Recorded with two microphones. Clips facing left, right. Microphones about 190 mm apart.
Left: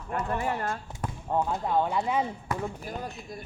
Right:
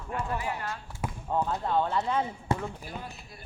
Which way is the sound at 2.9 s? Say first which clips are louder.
Left 5 dB; 45° left (ahead or behind).